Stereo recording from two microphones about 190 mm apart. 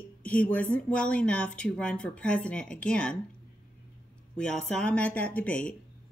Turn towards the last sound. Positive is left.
turn(degrees=5)  # may be behind; listen again after turning